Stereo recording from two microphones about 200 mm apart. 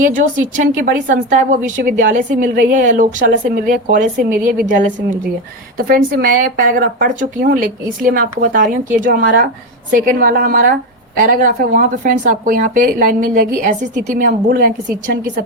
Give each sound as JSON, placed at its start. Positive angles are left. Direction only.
{"t": 0.0, "sound": "a woman's voice", "side_deg": -40}